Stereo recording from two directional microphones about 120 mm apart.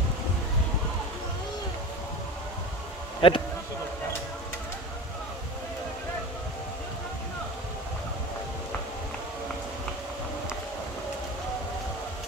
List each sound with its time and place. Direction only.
3.2 s speech: 45° left (ahead or behind)